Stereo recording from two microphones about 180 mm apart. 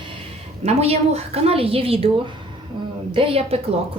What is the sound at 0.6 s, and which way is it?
A woman's voice, 35° right (ahead or behind).